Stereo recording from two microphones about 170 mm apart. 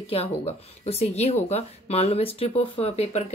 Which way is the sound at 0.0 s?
35° left (ahead or behind).